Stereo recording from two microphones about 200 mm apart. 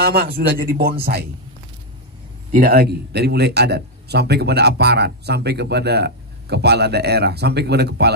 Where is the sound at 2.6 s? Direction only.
50° right (ahead or behind).